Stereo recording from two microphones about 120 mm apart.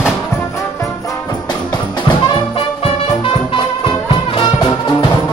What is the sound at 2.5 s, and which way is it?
Music, 50° left (ahead or behind).